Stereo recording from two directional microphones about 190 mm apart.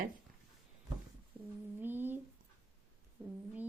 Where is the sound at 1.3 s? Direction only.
5° right (ahead or behind).